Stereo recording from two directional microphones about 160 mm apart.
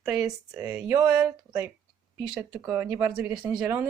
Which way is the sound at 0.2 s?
20° right (ahead or behind).